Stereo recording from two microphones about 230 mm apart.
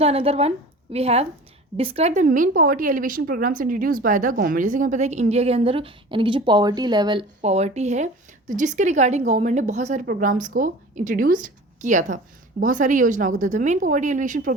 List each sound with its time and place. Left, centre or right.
0.0 s a woman's voice: right